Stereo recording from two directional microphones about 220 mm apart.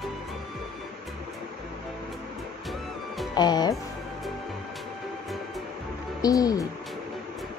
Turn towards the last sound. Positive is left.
turn(degrees=15)  # may be behind; listen again after turning